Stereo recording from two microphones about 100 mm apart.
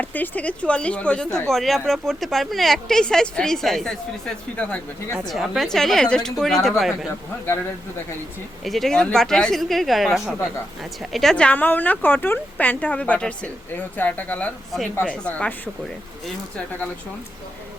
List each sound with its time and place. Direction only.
0.0 s speech: 15° left (ahead or behind)
4.5 s speech: 15° left (ahead or behind)
5.3 s speech: centre (ahead or behind)
8.6 s speech: centre (ahead or behind)